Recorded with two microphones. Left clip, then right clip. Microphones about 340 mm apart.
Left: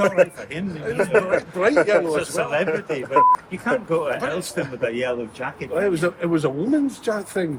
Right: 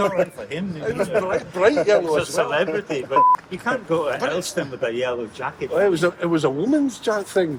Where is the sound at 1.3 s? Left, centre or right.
Centre.